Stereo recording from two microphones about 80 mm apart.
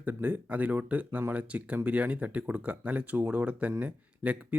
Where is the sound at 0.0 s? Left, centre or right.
Right.